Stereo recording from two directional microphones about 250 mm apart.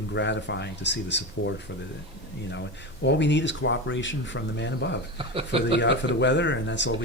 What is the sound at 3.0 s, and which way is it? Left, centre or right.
Speech, left.